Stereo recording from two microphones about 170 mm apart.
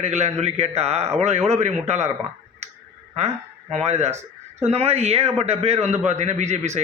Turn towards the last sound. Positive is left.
turn(degrees=-40)  # may be behind; listen again after turning